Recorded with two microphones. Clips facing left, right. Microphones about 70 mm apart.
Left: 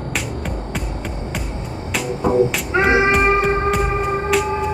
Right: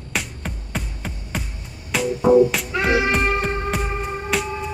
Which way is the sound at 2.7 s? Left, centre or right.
Left.